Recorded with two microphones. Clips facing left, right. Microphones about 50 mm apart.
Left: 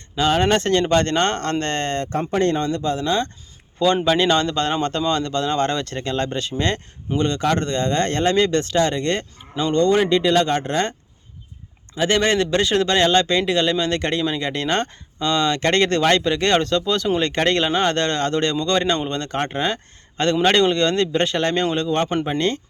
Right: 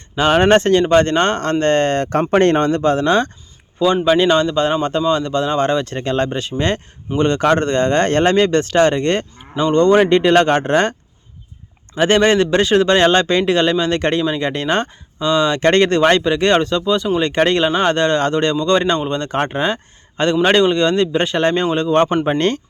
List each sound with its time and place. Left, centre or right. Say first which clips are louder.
0.2 s speech: right 6 dB; right
0.7 s a man's voice: right 5 dB; centre
2.3 s a man's voice: right 7 dB; right
2.6 s speech: right 7 dB; right
4.0 s speech: right 4 dB; centre; by 10.9 s right
11.9 s a man's voice: right 5 dB; right